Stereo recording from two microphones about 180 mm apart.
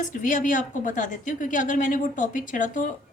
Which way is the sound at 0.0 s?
45° left (ahead or behind).